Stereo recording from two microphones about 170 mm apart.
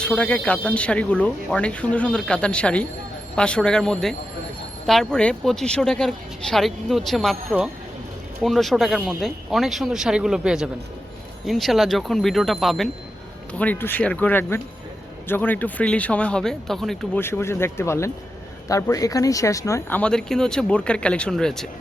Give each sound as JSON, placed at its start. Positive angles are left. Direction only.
{"t": 0.0, "sound": "speech", "side_deg": 5}
{"t": 17.2, "sound": "speech", "side_deg": 15}
{"t": 20.0, "sound": "speech", "side_deg": 5}